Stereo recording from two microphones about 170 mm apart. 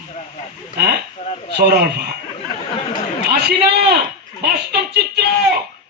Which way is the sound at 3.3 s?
75° right (ahead or behind).